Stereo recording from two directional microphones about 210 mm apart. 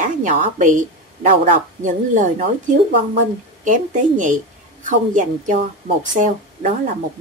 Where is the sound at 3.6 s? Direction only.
35° right (ahead or behind).